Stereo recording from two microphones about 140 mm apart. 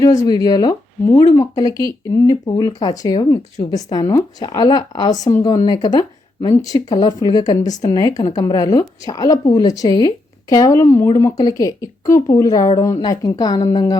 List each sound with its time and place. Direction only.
0.0 s a woman's voice: 25° left (ahead or behind)